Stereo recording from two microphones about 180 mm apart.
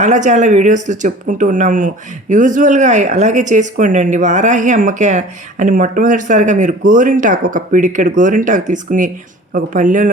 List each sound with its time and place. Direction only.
0.0 s a woman's voice: 40° right (ahead or behind)